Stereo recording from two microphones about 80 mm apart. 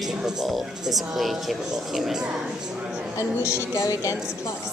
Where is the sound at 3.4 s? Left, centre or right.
Left.